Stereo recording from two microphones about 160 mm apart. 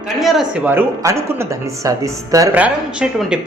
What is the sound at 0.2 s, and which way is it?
Speech, centre (ahead or behind).